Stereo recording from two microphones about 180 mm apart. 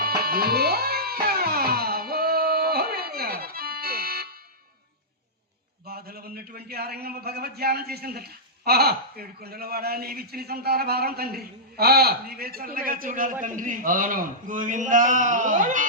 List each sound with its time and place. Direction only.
0.2 s music: 55° right (ahead or behind)
5.8 s a man's voice: 60° right (ahead or behind)